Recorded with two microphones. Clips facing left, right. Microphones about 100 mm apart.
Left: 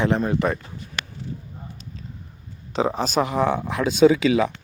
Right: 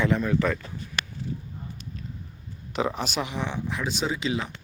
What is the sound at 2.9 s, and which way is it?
Speech, 40° left (ahead or behind).